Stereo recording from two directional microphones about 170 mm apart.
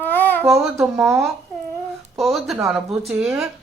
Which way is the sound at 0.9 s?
15° right (ahead or behind).